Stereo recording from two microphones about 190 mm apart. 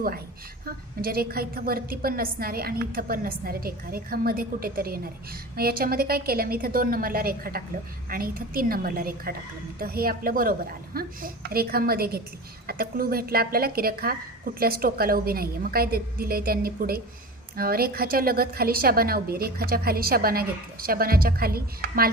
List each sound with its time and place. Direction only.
0.6 s a woman's voice: 50° right (ahead or behind)